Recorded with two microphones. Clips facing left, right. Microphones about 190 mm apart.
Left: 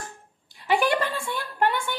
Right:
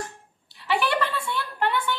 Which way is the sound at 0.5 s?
45° left (ahead or behind).